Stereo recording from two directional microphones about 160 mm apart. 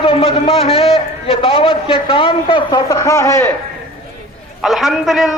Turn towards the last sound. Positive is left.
turn(degrees=0)  # may be behind; listen again after turning